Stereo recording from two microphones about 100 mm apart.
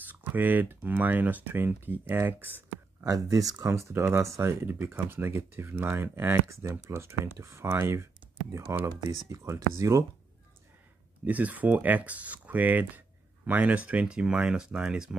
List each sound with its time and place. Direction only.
0.0 s speech: 20° right (ahead or behind)
3.0 s speech: 35° right (ahead or behind)
11.2 s speech: 15° right (ahead or behind)